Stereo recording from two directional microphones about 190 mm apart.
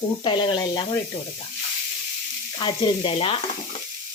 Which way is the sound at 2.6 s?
25° left (ahead or behind).